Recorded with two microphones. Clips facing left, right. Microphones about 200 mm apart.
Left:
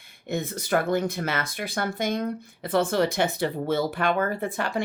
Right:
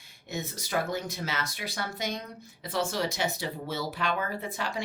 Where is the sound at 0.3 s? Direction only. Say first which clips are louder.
Left 8 dB; 55° left (ahead or behind).